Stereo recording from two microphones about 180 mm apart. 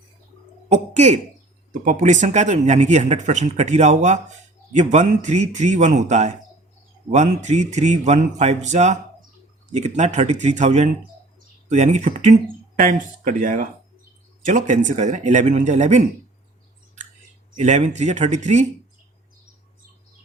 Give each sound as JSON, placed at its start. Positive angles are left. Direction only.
{"t": 0.9, "sound": "speech", "side_deg": -40}
{"t": 17.6, "sound": "speech", "side_deg": -40}